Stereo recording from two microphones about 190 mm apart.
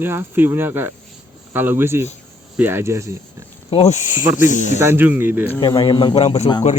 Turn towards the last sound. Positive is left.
turn(degrees=25)  # may be behind; listen again after turning